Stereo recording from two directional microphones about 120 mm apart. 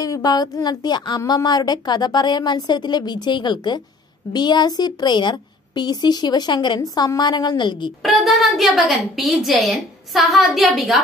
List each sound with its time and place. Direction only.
0.0 s speech: 30° left (ahead or behind)
8.0 s a woman's voice: centre (ahead or behind)